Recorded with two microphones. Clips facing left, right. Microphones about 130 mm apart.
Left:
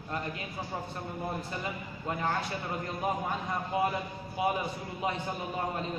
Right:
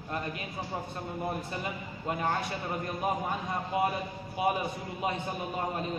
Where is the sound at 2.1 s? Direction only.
25° right (ahead or behind).